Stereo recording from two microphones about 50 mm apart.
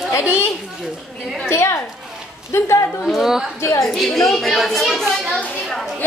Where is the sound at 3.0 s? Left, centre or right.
Centre.